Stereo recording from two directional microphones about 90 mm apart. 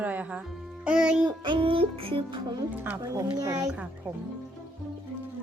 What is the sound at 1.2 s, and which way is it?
Music, 60° right (ahead or behind).